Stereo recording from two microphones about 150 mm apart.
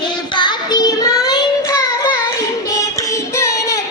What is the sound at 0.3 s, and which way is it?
Child singing, 30° left (ahead or behind).